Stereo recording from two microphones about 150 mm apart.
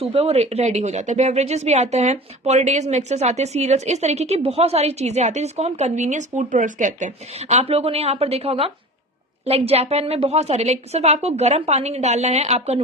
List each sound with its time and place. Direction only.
0.0 s speech: 40° right (ahead or behind)